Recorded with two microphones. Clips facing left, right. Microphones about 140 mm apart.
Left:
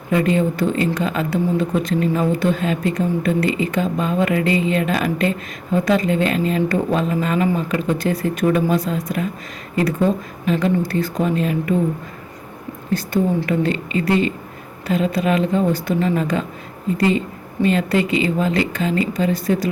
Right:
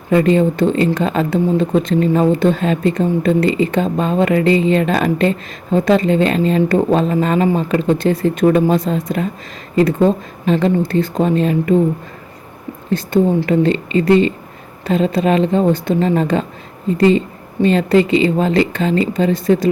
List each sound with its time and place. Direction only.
0.1 s a woman's voice: 35° right (ahead or behind)
12.9 s a woman's voice: 25° right (ahead or behind)